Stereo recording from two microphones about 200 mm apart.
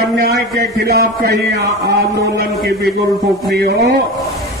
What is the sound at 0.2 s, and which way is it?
A man's voice, 50° right (ahead or behind).